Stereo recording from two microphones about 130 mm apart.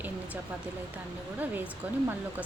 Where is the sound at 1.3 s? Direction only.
15° right (ahead or behind).